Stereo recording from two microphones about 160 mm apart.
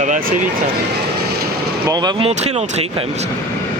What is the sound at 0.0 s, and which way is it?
Speech, 55° right (ahead or behind).